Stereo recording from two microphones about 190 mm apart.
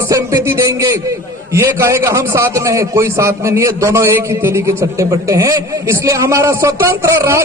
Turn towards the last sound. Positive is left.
turn(degrees=-15)  # may be behind; listen again after turning